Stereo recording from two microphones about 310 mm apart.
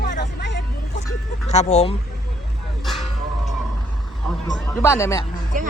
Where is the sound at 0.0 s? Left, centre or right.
Left.